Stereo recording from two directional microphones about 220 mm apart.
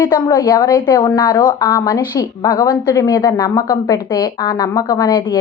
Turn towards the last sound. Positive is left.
turn(degrees=15)  # may be behind; listen again after turning